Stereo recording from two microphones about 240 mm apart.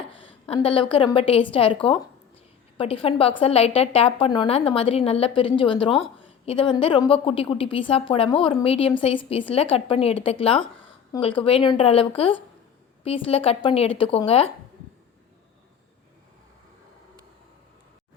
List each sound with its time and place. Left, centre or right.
0.2 s a woman's voice: left